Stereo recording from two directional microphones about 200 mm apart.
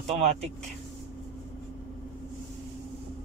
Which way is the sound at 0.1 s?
30° right (ahead or behind).